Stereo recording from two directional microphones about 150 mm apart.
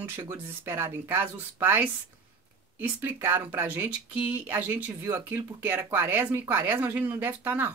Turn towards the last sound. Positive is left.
turn(degrees=-10)  # may be behind; listen again after turning